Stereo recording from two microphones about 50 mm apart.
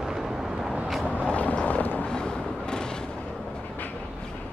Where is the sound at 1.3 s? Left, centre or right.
Left.